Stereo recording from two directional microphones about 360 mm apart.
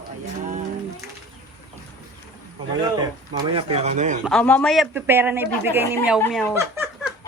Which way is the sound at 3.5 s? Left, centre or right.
Centre.